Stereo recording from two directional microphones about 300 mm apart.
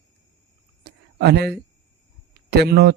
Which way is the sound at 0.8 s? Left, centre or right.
Right.